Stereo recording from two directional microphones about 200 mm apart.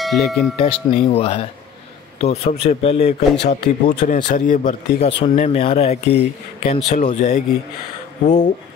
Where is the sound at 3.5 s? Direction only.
40° left (ahead or behind).